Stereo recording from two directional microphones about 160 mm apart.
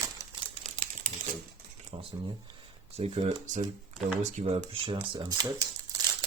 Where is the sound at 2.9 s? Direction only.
40° right (ahead or behind).